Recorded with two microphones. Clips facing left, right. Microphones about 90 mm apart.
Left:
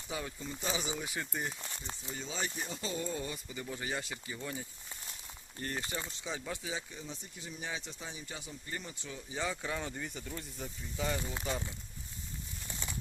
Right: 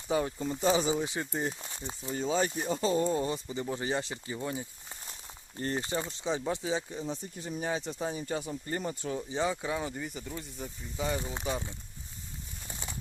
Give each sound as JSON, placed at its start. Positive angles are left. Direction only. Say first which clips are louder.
{"t": 0.1, "sound": "speech", "louder": "right 10 dB", "side_deg": -40}
{"t": 1.0, "sound": "speech", "louder": "right 5 dB", "side_deg": -25}
{"t": 2.0, "sound": "speech", "louder": "right 11 dB", "side_deg": -45}
{"t": 9.3, "sound": "speech", "louder": "right 5 dB", "side_deg": -25}
{"t": 9.6, "sound": "speech", "louder": "right 4 dB", "side_deg": -15}
{"t": 10.9, "sound": "speech", "louder": "right 3 dB", "side_deg": -15}
{"t": 12.6, "sound": "a sound", "louder": "right 2 dB", "side_deg": -20}